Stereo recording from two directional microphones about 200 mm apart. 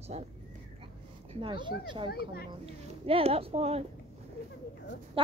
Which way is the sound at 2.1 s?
50° left (ahead or behind).